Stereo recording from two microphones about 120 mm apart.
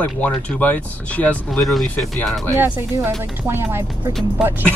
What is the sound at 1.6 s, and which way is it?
Music, centre (ahead or behind).